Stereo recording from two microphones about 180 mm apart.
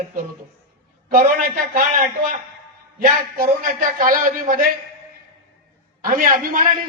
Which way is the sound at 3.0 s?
50° right (ahead or behind).